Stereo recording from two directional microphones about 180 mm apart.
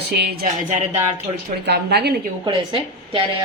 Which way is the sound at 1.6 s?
65° right (ahead or behind).